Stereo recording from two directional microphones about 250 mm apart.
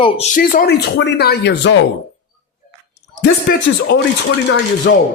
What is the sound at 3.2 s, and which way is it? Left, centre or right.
Speech, left.